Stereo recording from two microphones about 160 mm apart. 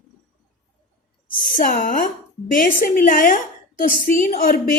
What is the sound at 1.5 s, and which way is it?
A woman's voice, 55° left (ahead or behind).